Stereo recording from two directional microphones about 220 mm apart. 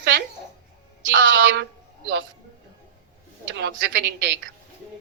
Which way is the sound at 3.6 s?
55° right (ahead or behind).